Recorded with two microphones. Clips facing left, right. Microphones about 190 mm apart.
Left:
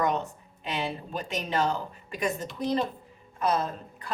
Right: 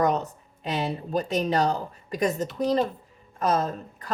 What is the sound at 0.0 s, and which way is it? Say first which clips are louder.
A woman's voice: right 4 dB; 40° right (ahead or behind).